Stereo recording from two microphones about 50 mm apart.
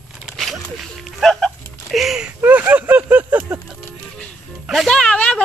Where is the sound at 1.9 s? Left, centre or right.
Centre.